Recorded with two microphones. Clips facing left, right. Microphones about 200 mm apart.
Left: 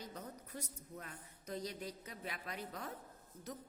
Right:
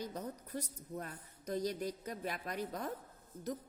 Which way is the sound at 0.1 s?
40° right (ahead or behind).